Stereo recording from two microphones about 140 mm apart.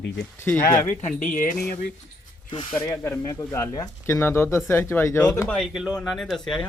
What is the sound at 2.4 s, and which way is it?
Speech, 35° left (ahead or behind).